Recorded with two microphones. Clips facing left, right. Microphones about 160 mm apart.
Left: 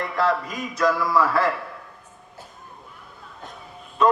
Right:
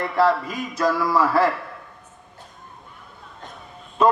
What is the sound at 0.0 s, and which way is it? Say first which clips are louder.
A man's voice: right 3 dB; centre (ahead or behind).